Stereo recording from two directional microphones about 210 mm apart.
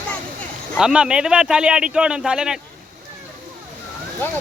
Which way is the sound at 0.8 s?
5° right (ahead or behind).